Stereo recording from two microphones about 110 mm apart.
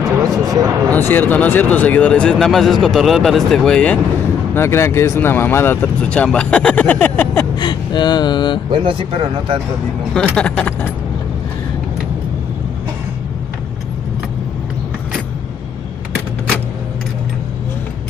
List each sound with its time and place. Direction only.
0.2 s a sound: 35° right (ahead or behind)
0.9 s speech: 15° left (ahead or behind)
4.6 s speech: 25° left (ahead or behind)
7.5 s speech: 40° left (ahead or behind)
8.7 s speech: 50° right (ahead or behind)
10.3 s speech: 10° left (ahead or behind)